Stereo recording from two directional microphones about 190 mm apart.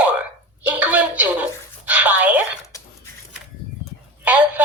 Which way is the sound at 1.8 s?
10° right (ahead or behind).